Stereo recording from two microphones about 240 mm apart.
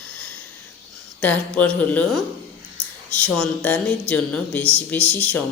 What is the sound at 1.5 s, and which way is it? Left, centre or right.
A man's voice, centre.